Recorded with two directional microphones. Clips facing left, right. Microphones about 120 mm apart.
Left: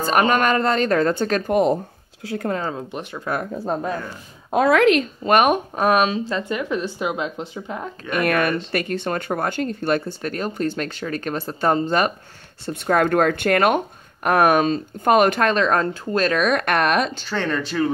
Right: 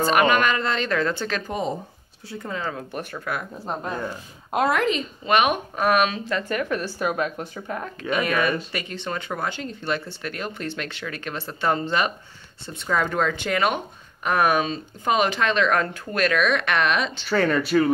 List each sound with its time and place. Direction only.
0.0 s speech: 40° left (ahead or behind)
1.5 s speech: 65° left (ahead or behind)
2.7 s speech: 20° left (ahead or behind)
4.7 s speech: 75° left (ahead or behind)
5.2 s speech: 45° left (ahead or behind); by 7.9 s 15° left (ahead or behind)
8.2 s speech: 55° left (ahead or behind)
12.6 s speech: 55° left (ahead or behind)
17.3 s speech: 5° right (ahead or behind)